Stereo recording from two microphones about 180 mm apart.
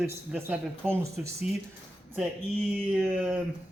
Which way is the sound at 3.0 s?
10° right (ahead or behind).